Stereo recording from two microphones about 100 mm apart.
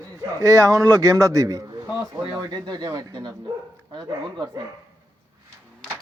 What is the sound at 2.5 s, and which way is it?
Speech, 45° right (ahead or behind).